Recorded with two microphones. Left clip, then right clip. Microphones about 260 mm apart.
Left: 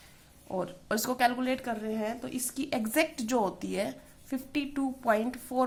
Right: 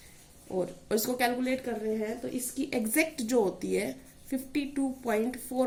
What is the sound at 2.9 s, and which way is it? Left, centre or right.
Speech, left.